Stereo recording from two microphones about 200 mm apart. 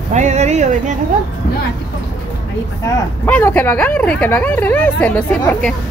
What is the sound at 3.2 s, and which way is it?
Speech, 10° left (ahead or behind).